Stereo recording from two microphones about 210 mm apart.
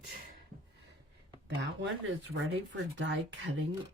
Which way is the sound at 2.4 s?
60° right (ahead or behind).